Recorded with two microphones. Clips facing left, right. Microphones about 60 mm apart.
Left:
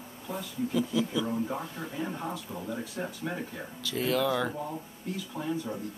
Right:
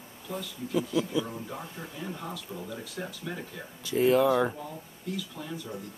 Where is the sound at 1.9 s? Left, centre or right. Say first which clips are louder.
Left 4 dB; left.